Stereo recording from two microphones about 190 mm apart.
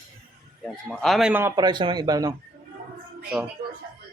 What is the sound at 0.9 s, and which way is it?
Speech, centre (ahead or behind).